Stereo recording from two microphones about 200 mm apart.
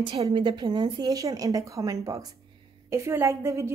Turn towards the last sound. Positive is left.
turn(degrees=-15)  # may be behind; listen again after turning